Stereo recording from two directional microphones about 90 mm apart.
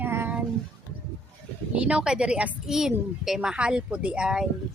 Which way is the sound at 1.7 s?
10° right (ahead or behind).